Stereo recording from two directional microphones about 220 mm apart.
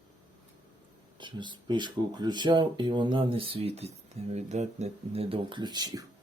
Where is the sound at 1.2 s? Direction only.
20° right (ahead or behind).